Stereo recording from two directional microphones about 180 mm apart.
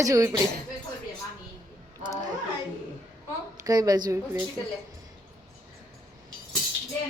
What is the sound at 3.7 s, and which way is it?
Speech, 20° right (ahead or behind).